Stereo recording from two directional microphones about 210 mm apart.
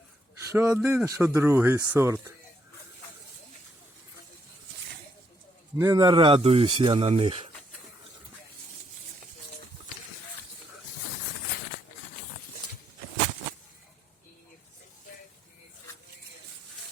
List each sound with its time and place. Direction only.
0.5 s speech: 10° right (ahead or behind)
5.7 s speech: 15° right (ahead or behind)